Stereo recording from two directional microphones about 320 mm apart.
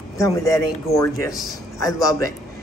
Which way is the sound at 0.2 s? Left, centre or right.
Centre.